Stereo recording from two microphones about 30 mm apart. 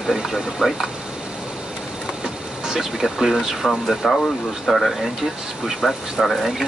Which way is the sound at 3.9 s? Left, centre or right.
Centre.